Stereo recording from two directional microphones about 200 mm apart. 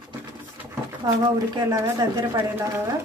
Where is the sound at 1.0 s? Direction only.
20° right (ahead or behind).